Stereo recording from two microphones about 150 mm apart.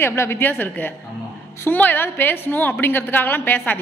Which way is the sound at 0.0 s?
15° left (ahead or behind).